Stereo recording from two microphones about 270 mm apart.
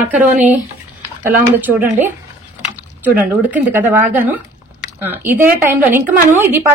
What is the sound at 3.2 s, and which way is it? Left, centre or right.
A woman's voice, centre.